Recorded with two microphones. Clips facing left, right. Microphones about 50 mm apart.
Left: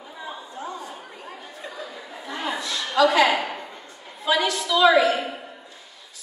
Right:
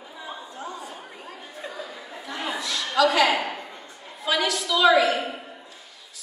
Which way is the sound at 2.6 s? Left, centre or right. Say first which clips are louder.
Even; left.